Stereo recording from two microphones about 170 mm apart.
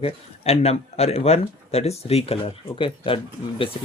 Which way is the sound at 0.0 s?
35° left (ahead or behind).